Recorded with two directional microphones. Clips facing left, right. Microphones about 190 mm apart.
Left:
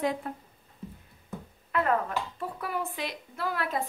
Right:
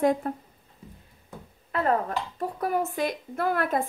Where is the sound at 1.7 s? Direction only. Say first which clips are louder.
Right 2 dB; 35° right (ahead or behind).